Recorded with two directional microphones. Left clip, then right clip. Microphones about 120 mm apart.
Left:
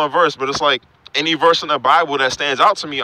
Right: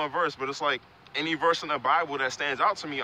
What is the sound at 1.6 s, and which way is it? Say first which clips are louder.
Speech: left 11 dB; 65° left (ahead or behind).